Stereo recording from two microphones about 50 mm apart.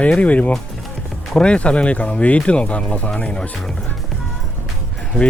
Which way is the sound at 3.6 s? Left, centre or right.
Centre.